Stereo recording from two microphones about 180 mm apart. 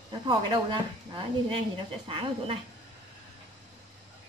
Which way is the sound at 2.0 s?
30° right (ahead or behind).